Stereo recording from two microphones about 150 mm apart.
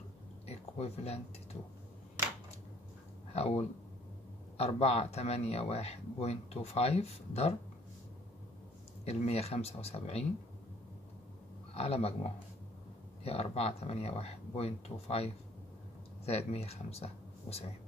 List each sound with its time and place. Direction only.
0.5 s speech: 45° left (ahead or behind)
3.3 s a man's voice: 45° left (ahead or behind)
9.0 s a man's voice: 45° left (ahead or behind)
11.7 s a man's voice: 40° left (ahead or behind)